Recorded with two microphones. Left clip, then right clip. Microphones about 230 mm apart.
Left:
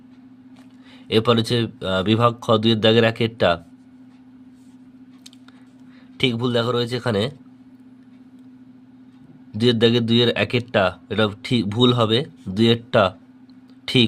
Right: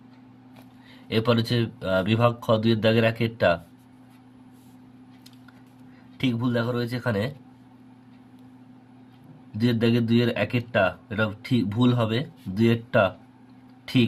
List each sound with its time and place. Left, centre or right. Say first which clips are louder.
1.1 s speech: left 6 dB; left
6.1 s speech: left 6 dB; left
9.6 s speech: left 7 dB; left